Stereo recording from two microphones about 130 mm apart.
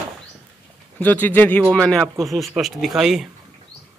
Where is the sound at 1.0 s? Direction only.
15° left (ahead or behind); by 3.3 s 5° right (ahead or behind).